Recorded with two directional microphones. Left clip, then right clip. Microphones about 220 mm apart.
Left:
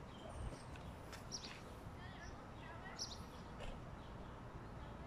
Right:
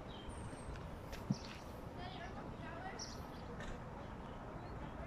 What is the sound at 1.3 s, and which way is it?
Walk, 20° left (ahead or behind).